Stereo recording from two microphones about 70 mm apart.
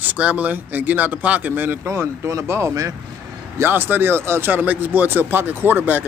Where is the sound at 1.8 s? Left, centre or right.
Right.